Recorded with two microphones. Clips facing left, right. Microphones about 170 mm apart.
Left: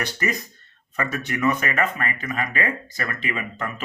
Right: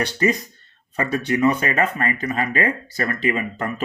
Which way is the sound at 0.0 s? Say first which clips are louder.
Right 6 dB; 30° right (ahead or behind).